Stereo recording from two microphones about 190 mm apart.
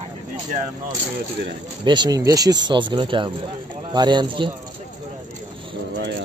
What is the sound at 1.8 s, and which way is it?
Speech, 25° right (ahead or behind).